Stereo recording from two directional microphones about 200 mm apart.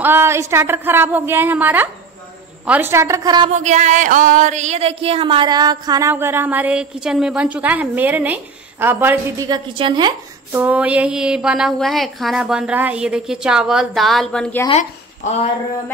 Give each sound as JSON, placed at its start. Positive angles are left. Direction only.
{"t": 0.0, "sound": "speech", "side_deg": -10}
{"t": 3.5, "sound": "speech", "side_deg": -35}
{"t": 10.6, "sound": "a woman's voice", "side_deg": -5}
{"t": 14.7, "sound": "speech", "side_deg": 35}